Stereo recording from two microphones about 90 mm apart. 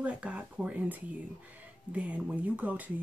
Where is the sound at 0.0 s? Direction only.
15° right (ahead or behind).